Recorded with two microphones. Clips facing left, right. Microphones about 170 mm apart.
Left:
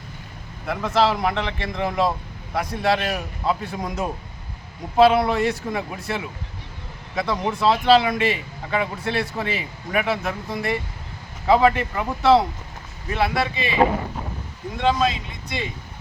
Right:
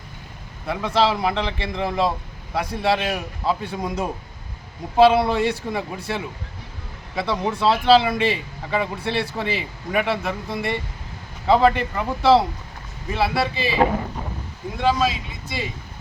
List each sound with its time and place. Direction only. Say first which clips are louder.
0.7 s speech: even; centre (ahead or behind)
14.8 s speech: even; 5° right (ahead or behind)